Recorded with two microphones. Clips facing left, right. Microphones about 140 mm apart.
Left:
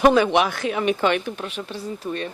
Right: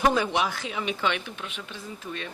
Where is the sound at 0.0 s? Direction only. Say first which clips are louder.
Left 7 dB; 75° left (ahead or behind).